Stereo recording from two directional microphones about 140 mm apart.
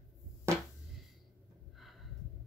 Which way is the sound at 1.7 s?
Centre (ahead or behind).